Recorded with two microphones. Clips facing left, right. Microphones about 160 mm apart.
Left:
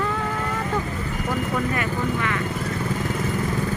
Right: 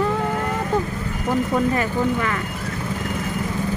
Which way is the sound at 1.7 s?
40° right (ahead or behind).